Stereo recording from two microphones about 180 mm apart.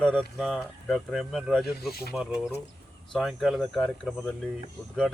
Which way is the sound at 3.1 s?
Centre (ahead or behind).